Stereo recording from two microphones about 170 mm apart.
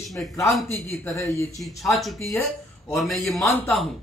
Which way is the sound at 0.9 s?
15° left (ahead or behind).